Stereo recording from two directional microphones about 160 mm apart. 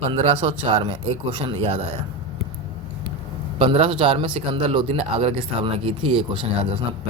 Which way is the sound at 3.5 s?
35° right (ahead or behind).